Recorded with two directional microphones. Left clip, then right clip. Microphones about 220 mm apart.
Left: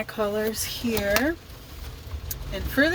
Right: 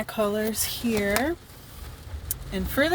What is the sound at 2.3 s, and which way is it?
Vehicle, 45° right (ahead or behind).